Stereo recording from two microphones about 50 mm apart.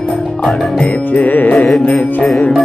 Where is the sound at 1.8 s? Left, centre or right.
Left.